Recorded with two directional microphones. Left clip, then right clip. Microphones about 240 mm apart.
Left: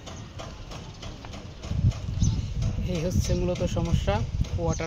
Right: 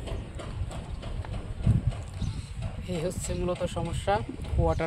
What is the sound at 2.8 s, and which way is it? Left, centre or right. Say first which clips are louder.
Speech: left 2 dB; centre.